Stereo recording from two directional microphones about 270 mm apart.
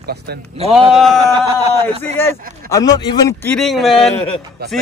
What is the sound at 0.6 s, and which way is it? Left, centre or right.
Speech, right.